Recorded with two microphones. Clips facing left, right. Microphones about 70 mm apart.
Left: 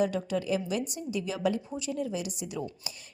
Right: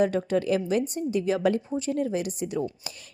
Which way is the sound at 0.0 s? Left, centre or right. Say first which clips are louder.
Right 5 dB; right.